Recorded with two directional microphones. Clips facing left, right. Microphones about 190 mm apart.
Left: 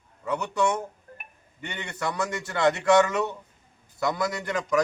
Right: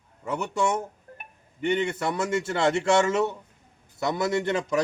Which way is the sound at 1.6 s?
25° right (ahead or behind).